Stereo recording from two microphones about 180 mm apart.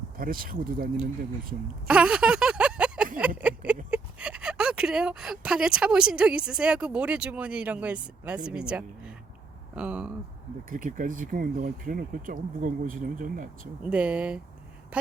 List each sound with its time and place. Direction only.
0.2 s speech: 50° right (ahead or behind)
1.9 s a sound: 5° right (ahead or behind)
3.9 s speech: 5° right (ahead or behind)
9.7 s a sound: 5° right (ahead or behind)
10.7 s speech: 45° right (ahead or behind)
13.9 s speech: 5° right (ahead or behind)